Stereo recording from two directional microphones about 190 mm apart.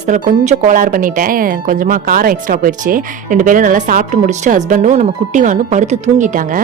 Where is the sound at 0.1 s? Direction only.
45° right (ahead or behind).